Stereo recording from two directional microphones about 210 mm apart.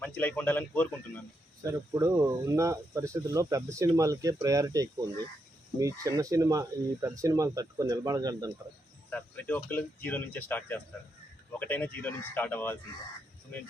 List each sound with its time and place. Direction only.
0.0 s a man's voice: 5° left (ahead or behind)
1.6 s speech: 15° right (ahead or behind)
9.0 s a man's voice: 5° left (ahead or behind)